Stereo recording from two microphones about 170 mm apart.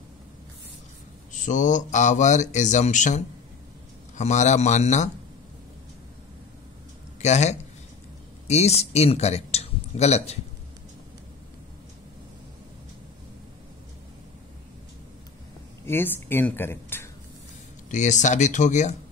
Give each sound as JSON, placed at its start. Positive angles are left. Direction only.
{"t": 1.4, "sound": "speech", "side_deg": 45}
{"t": 4.2, "sound": "speech", "side_deg": 45}
{"t": 7.2, "sound": "a man's voice", "side_deg": 40}
{"t": 15.8, "sound": "speech", "side_deg": 15}
{"t": 17.8, "sound": "speech", "side_deg": 45}